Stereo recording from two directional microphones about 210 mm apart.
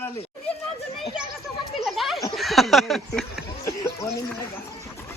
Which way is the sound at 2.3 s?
Centre (ahead or behind).